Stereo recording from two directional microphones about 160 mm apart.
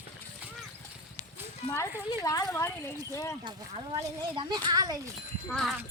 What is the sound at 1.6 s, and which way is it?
Speech, 20° left (ahead or behind).